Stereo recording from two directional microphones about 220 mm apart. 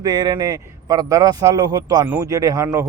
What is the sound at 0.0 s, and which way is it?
A man's voice, 20° right (ahead or behind).